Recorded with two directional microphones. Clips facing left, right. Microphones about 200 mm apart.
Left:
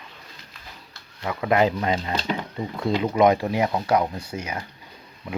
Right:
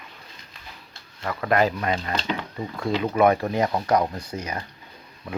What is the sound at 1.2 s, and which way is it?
Speech, 10° left (ahead or behind).